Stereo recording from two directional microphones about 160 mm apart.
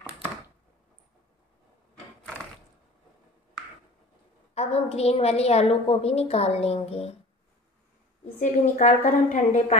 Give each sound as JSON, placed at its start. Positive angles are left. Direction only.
{"t": 4.6, "sound": "a woman's voice", "side_deg": 40}
{"t": 8.4, "sound": "a woman's voice", "side_deg": 50}